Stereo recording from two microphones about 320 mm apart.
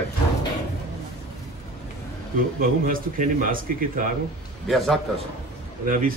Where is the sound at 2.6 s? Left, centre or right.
Right.